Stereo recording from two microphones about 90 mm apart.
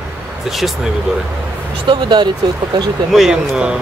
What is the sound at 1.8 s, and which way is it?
Speech, 55° right (ahead or behind).